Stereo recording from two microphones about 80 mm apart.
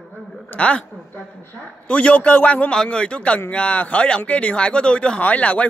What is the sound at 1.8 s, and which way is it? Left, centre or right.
A man's voice, centre.